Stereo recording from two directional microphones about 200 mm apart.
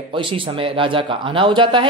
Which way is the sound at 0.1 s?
25° right (ahead or behind).